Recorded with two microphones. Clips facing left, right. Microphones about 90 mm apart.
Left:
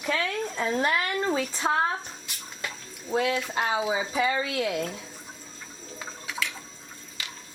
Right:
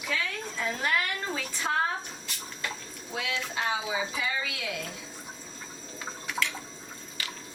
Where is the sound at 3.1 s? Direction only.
40° left (ahead or behind).